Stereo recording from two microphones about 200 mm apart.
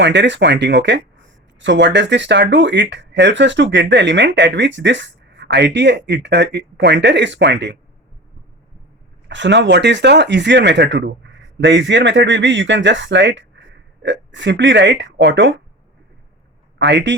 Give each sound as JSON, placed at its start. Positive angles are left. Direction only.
{"t": 0.0, "sound": "speech", "side_deg": -65}
{"t": 9.3, "sound": "speech", "side_deg": -65}
{"t": 16.7, "sound": "speech", "side_deg": -60}